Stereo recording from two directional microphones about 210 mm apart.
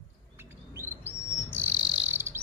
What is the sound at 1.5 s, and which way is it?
Bird, 10° right (ahead or behind).